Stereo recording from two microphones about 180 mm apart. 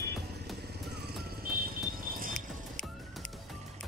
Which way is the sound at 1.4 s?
55° right (ahead or behind).